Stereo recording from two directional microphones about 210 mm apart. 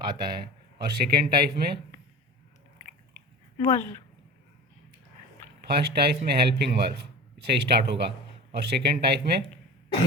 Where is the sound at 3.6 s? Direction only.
15° left (ahead or behind).